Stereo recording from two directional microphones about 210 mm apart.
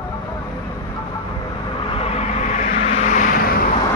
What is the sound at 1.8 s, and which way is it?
Vehicle, 25° left (ahead or behind).